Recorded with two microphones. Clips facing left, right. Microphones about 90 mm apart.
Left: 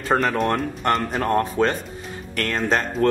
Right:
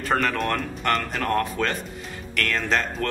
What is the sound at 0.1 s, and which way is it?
Speech, 15° left (ahead or behind).